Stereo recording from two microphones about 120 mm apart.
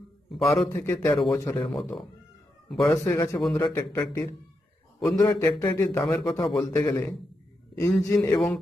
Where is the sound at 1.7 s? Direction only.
5° left (ahead or behind).